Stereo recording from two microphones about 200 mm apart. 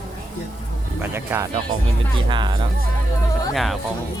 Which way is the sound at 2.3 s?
25° right (ahead or behind).